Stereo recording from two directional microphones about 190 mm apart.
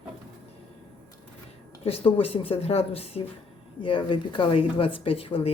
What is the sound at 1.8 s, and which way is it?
Speech, 30° left (ahead or behind).